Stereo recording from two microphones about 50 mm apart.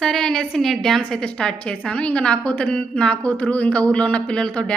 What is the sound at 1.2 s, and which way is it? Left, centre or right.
A woman's voice, left.